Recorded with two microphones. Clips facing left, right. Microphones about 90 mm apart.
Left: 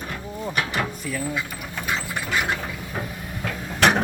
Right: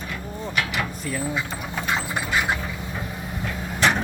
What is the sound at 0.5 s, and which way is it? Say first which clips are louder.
Drawer open or close: even; 35° left (ahead or behind).